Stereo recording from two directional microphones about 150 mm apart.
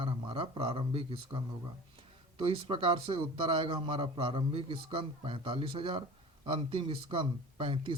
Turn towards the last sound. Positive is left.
turn(degrees=-35)  # may be behind; listen again after turning